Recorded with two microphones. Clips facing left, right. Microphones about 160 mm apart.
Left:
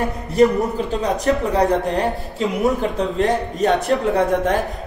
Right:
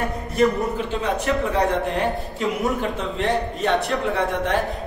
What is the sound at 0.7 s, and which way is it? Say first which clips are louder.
A man's voice: left 3 dB; 40° left (ahead or behind).